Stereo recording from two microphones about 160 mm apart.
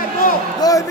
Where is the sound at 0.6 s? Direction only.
20° left (ahead or behind).